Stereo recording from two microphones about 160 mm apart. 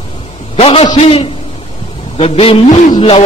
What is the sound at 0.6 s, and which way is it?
A man's voice, 35° left (ahead or behind).